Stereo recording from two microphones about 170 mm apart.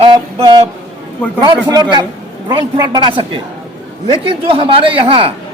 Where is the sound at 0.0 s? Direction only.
25° right (ahead or behind).